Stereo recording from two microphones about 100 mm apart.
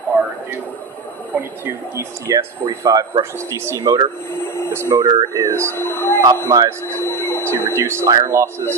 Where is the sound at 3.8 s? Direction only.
40° right (ahead or behind).